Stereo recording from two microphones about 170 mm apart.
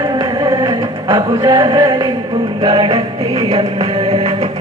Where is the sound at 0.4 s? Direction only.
20° right (ahead or behind).